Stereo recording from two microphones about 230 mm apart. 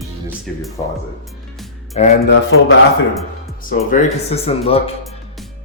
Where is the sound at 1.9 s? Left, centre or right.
Left.